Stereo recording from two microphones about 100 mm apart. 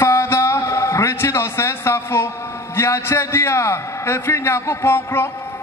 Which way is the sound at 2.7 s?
30° left (ahead or behind).